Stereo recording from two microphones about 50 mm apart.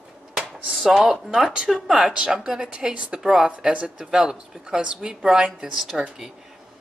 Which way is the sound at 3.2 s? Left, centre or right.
Centre.